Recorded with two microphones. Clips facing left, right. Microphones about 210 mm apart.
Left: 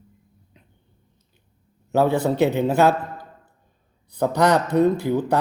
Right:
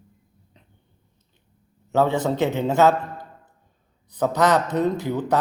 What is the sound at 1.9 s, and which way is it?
Speech, 10° left (ahead or behind).